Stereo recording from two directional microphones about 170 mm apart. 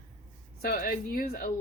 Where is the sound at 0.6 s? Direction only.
60° left (ahead or behind).